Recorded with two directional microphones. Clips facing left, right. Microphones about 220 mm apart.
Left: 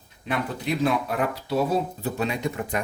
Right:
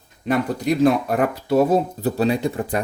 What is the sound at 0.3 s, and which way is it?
Speech, 45° right (ahead or behind).